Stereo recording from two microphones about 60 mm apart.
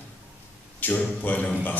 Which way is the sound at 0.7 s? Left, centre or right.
Left.